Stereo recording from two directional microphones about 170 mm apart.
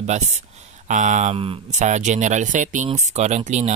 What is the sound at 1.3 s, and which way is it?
Speech, 35° right (ahead or behind).